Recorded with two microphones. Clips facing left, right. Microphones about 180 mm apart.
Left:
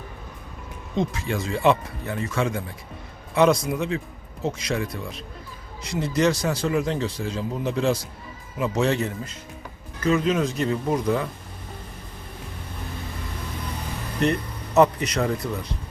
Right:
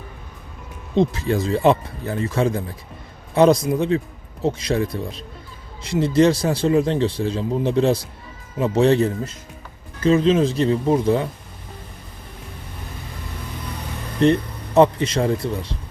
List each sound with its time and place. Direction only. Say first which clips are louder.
0.9 s speech: right 7 dB; 35° right (ahead or behind)
14.2 s speech: right 7 dB; 30° right (ahead or behind)